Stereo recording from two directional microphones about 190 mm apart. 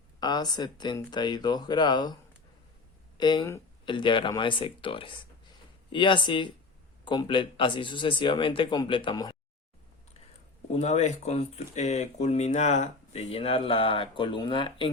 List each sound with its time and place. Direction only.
0.2 s speech: 20° left (ahead or behind)
3.2 s speech: 20° left (ahead or behind)
10.7 s speech: 35° left (ahead or behind)